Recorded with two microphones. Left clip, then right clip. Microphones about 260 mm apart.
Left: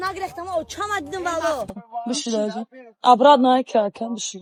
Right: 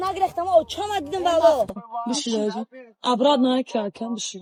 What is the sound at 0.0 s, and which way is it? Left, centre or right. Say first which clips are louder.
Speech: right 4 dB; right.